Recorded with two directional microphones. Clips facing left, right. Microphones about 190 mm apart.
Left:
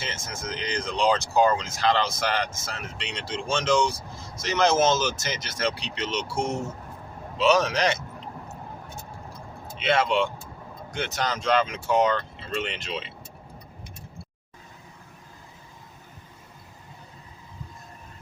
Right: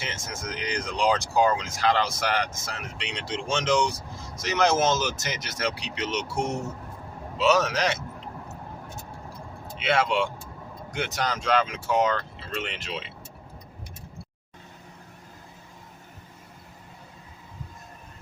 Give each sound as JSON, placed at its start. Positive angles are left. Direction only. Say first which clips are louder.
{"t": 0.0, "sound": "speech", "louder": "even", "side_deg": -15}
{"t": 7.3, "sound": "speech", "louder": "left 1 dB", "side_deg": -5}
{"t": 9.7, "sound": "speech", "louder": "left 1 dB", "side_deg": -5}